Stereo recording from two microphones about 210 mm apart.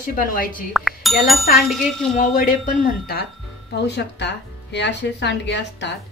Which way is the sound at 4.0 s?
55° left (ahead or behind).